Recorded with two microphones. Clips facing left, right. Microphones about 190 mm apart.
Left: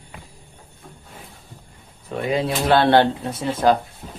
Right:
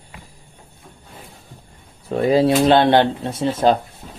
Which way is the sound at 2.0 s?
35° right (ahead or behind).